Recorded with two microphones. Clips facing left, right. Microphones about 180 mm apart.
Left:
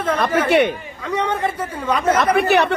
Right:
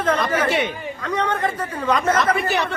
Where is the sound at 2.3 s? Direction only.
65° left (ahead or behind).